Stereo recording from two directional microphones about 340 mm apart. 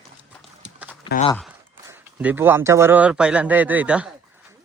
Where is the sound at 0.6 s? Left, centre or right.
Centre.